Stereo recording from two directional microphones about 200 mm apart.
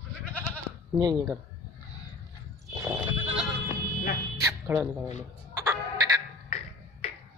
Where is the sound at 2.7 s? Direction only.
15° right (ahead or behind).